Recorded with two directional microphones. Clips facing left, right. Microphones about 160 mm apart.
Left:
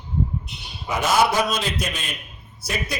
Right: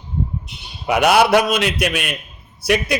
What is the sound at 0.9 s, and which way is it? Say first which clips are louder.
A man's voice: right 6 dB; 70° right (ahead or behind).